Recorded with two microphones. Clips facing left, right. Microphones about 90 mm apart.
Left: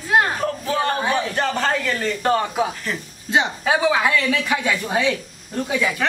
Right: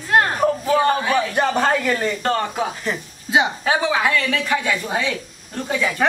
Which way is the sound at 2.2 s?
10° left (ahead or behind).